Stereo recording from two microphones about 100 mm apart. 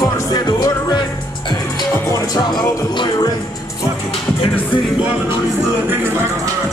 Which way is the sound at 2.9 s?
50° left (ahead or behind).